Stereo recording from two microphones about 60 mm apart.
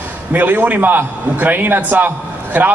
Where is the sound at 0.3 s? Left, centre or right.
Right.